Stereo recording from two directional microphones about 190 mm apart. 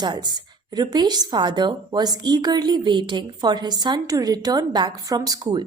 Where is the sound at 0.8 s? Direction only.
20° right (ahead or behind).